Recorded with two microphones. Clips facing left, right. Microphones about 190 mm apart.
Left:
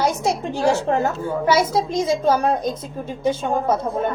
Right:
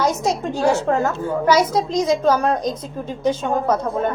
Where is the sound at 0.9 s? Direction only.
25° left (ahead or behind).